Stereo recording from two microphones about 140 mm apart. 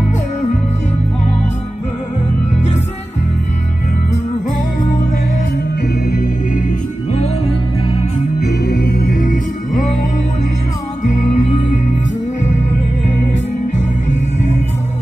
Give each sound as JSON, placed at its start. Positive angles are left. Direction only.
{"t": 6.0, "sound": "music", "side_deg": 90}
{"t": 8.9, "sound": "music", "side_deg": 90}
{"t": 11.1, "sound": "music", "side_deg": 60}